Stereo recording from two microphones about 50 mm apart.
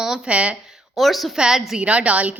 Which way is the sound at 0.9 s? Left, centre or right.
Centre.